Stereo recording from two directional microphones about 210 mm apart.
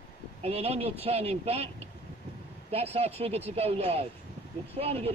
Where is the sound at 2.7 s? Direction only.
30° right (ahead or behind).